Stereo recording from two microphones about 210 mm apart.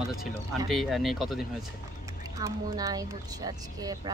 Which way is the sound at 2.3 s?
15° right (ahead or behind).